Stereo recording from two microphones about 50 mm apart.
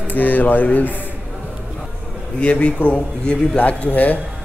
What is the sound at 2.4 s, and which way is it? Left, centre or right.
A man's voice, left.